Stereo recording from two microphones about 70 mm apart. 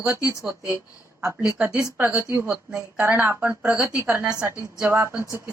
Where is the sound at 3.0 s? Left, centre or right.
Right; by 4.4 s centre.